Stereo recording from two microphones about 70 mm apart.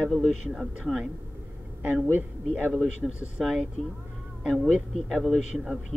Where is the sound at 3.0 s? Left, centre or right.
Centre.